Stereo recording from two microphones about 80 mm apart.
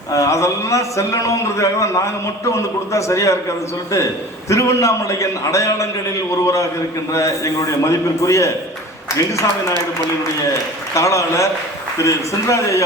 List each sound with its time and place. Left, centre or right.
0.1 s a man's voice: left
4.4 s a man's voice: left
10.9 s a man's voice: left